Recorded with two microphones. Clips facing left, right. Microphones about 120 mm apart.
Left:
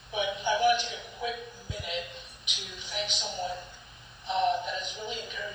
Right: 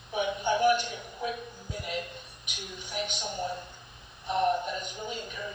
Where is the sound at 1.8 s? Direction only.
45° right (ahead or behind).